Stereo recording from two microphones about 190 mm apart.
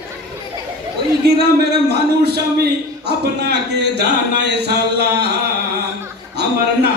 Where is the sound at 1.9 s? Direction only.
60° right (ahead or behind).